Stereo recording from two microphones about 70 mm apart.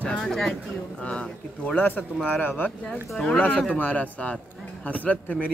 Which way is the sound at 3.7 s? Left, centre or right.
Left.